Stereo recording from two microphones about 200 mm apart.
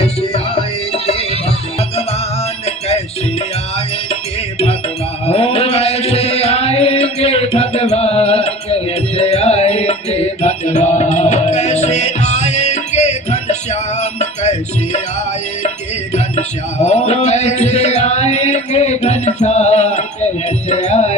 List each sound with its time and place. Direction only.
0.0 s music: 30° left (ahead or behind)
2.6 s music: 30° left (ahead or behind)
5.2 s music: 30° left (ahead or behind)
16.1 s music: 35° left (ahead or behind)